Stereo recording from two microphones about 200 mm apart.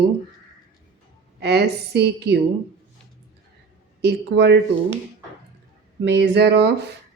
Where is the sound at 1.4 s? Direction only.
55° right (ahead or behind).